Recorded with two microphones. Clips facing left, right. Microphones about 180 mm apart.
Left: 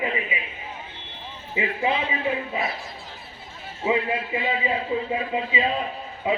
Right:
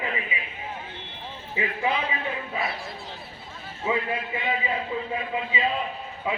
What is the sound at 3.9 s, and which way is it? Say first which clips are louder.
A man's voice: left 3 dB; 20° left (ahead or behind).